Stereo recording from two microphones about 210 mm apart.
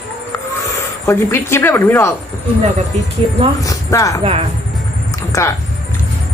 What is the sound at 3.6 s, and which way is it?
Speech, 15° left (ahead or behind).